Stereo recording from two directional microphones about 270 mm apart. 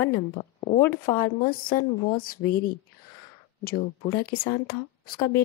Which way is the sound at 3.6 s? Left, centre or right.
Left.